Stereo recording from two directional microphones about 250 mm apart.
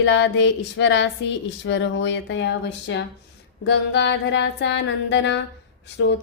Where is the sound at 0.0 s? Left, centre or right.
Left.